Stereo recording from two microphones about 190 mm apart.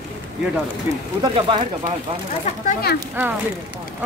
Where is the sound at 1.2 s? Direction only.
25° right (ahead or behind).